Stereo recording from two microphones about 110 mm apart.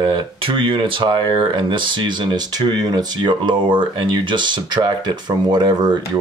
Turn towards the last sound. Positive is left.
turn(degrees=-40)  # may be behind; listen again after turning